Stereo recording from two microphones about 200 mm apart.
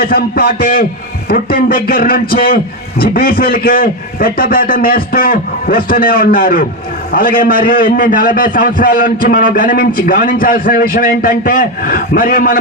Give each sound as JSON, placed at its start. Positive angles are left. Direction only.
{"t": 0.0, "sound": "a man's voice", "side_deg": 50}